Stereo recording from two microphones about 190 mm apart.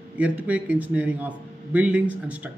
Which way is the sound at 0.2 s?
10° right (ahead or behind).